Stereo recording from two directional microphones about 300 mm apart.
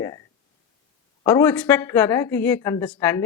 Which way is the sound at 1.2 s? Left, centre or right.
Centre.